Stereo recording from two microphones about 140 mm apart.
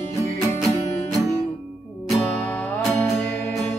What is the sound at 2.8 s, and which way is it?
Music, centre (ahead or behind).